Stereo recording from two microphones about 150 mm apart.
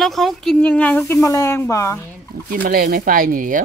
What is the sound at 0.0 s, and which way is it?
Speech, centre (ahead or behind).